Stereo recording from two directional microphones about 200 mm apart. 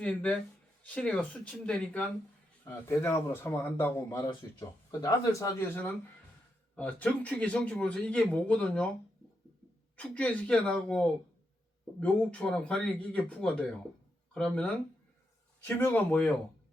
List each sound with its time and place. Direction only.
0.0 s a man's voice: 5° left (ahead or behind)
10.0 s a man's voice: 5° left (ahead or behind)